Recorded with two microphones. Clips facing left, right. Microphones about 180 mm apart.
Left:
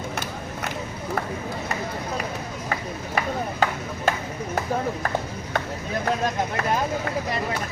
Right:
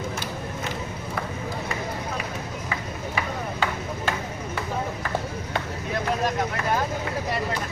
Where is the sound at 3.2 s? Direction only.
45° left (ahead or behind).